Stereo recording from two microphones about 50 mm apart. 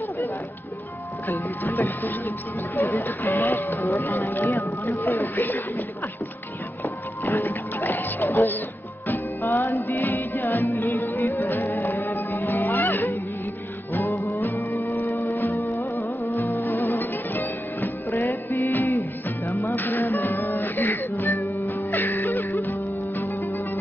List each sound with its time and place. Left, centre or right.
1.6 s speech: left
6.8 s music: left
9.8 s music: left
14.1 s music: left
15.0 s music: left
15.3 s music: left
15.6 s music: left
16.4 s music: left